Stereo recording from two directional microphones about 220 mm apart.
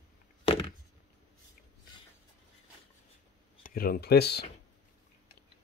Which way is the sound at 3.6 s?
40° left (ahead or behind).